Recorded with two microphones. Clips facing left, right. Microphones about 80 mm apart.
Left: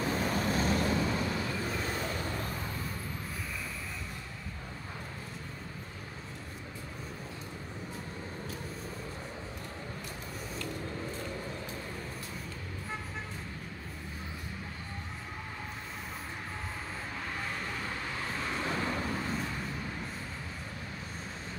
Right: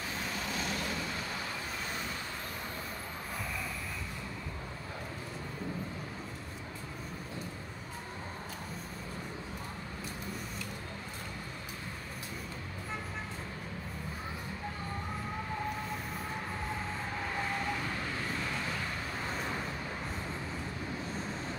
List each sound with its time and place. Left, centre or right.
0.4 s vehicle: left